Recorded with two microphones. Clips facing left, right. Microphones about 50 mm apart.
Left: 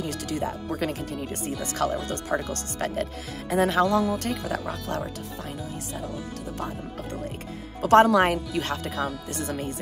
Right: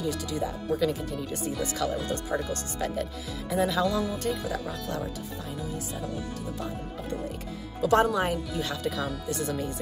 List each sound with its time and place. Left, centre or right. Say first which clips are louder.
0.0 s speech: left 1 dB; left
4.1 s speech: left 2 dB; left
7.8 s speech: left 6 dB; left